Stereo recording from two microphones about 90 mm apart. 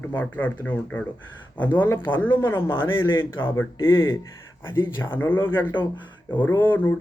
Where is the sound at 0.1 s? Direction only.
20° left (ahead or behind).